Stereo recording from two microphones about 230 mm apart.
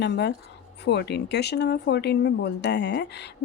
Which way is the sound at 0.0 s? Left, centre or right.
Left.